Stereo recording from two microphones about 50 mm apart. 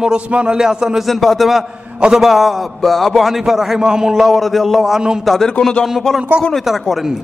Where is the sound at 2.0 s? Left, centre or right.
Centre.